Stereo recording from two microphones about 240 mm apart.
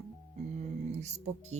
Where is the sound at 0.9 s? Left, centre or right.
Right.